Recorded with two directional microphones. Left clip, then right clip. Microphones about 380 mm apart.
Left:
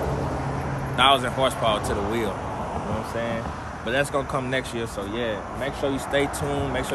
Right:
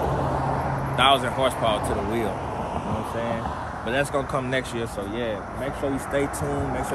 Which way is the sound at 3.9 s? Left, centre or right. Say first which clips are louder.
Left 1 dB; centre.